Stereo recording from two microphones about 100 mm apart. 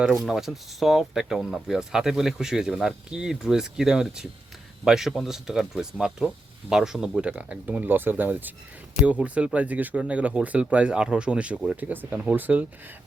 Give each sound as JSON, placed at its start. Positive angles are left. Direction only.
{"t": 0.0, "sound": "speech", "side_deg": -5}